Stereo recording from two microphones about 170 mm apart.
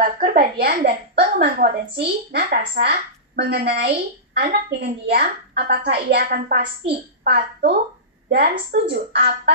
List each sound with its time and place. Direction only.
0.0 s a woman's voice: 55° right (ahead or behind); by 9.3 s 75° right (ahead or behind)